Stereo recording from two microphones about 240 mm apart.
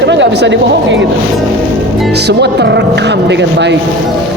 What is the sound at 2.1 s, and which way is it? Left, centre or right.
A man's voice, right.